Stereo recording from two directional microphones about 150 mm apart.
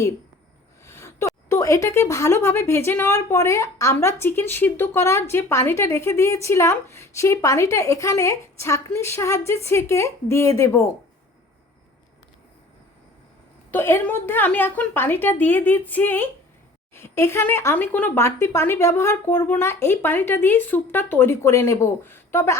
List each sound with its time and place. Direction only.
0.9 s a sound: 20° left (ahead or behind)
1.5 s speech: 20° left (ahead or behind)
13.7 s speech: 15° left (ahead or behind)